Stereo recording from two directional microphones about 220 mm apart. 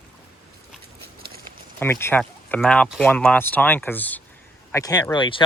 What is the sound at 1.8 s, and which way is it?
Speech, 10° left (ahead or behind).